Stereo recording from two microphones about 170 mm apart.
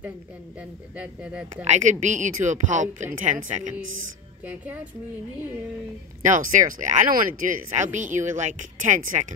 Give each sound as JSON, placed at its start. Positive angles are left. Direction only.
{"t": 0.6, "sound": "speech", "side_deg": -5}
{"t": 1.6, "sound": "speech", "side_deg": -45}
{"t": 4.5, "sound": "speech", "side_deg": -10}
{"t": 6.2, "sound": "speech", "side_deg": -50}